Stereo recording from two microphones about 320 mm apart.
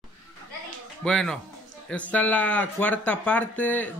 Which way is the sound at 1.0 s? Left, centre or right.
Centre.